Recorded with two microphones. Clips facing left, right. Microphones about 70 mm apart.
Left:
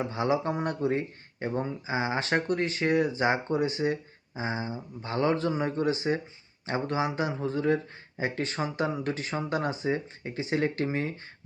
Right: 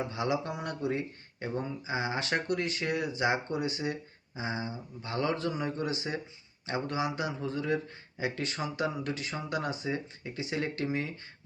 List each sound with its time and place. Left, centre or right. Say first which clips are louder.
0.0 s speech: left 4 dB; left